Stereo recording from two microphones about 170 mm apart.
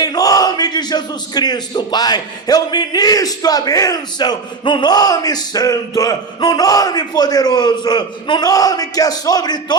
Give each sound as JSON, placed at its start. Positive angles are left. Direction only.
{"t": 0.0, "sound": "speech", "side_deg": 20}